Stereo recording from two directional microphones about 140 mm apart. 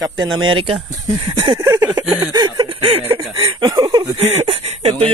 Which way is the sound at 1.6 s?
20° right (ahead or behind).